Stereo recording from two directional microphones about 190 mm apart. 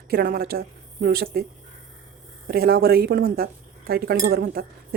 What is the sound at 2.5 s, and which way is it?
Speech, 50° right (ahead or behind).